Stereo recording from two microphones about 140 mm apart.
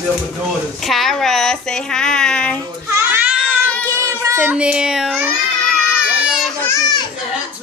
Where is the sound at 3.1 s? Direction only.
15° right (ahead or behind).